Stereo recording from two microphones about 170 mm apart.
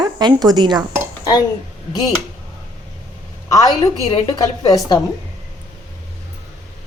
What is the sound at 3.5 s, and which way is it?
A woman's voice, 25° left (ahead or behind).